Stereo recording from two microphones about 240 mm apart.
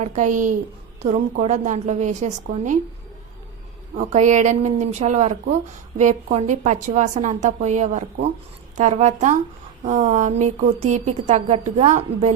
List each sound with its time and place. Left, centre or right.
0.0 s a woman's voice: right
3.9 s speech: right